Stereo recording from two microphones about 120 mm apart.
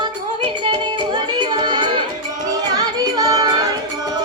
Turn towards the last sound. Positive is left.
turn(degrees=-35)  # may be behind; listen again after turning